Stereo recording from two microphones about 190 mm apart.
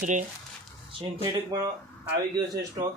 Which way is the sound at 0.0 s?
40° right (ahead or behind).